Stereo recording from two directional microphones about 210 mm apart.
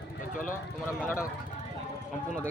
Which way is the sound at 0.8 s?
10° left (ahead or behind).